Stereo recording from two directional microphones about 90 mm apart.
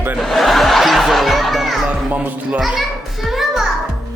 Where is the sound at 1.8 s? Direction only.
15° right (ahead or behind).